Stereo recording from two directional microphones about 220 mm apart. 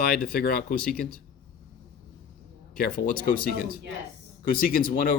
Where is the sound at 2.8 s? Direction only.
40° left (ahead or behind).